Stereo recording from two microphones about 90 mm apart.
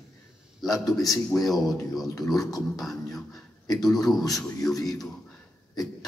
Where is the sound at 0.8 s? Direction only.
40° left (ahead or behind).